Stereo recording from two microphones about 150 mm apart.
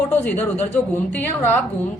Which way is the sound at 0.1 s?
10° left (ahead or behind).